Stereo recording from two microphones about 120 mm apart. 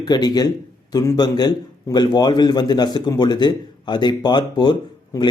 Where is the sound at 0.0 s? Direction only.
35° left (ahead or behind).